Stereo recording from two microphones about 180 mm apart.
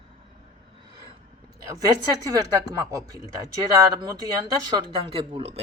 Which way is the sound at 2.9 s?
20° right (ahead or behind).